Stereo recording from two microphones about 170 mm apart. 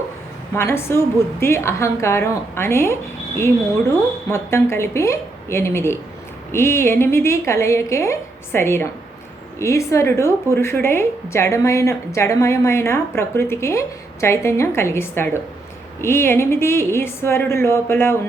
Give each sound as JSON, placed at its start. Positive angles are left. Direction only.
{"t": 0.5, "sound": "a woman's voice", "side_deg": 15}